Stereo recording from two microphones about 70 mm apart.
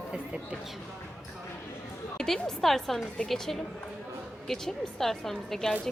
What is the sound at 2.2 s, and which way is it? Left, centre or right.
Speech, centre.